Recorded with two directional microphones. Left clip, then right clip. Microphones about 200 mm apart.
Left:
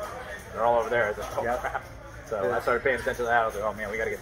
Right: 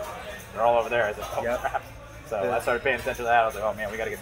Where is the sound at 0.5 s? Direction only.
5° right (ahead or behind).